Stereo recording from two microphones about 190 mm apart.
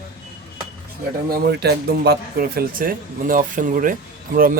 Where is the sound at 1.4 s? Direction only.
60° right (ahead or behind).